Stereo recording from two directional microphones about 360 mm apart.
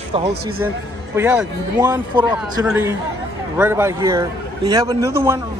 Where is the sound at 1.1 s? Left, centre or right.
Centre.